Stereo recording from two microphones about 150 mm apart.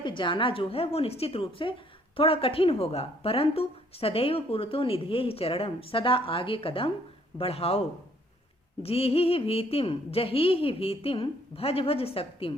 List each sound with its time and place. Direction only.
0.0 s a woman's voice: 30° left (ahead or behind)
8.8 s a woman's voice: 40° left (ahead or behind)